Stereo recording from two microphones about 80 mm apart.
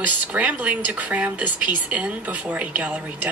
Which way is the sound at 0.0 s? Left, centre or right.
Centre.